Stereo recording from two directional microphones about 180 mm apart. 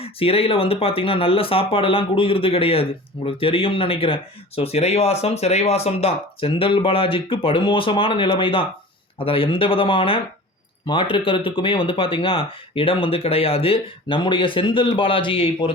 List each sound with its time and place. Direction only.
0.0 s speech: 30° left (ahead or behind)